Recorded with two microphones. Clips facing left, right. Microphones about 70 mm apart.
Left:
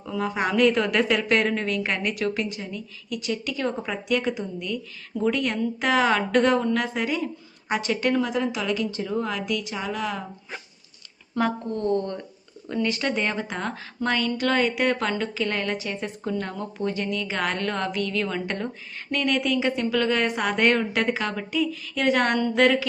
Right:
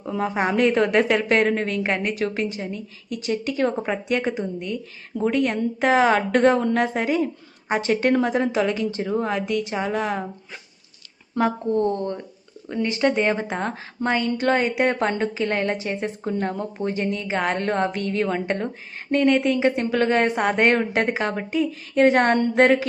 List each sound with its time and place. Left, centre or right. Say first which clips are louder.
0.0 s a woman's voice: right 3 dB; right
11.6 s a woman's voice: right 3 dB; right